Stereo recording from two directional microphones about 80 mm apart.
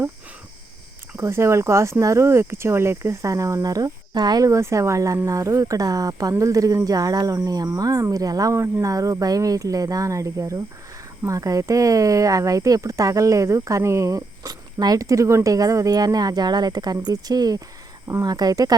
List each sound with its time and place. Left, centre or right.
1.2 s speech: right
4.4 s speech: right